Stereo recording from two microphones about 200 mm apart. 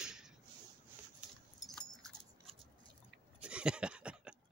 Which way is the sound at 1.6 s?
Centre (ahead or behind).